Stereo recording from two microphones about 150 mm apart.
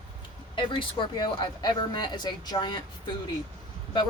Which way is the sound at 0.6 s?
30° left (ahead or behind).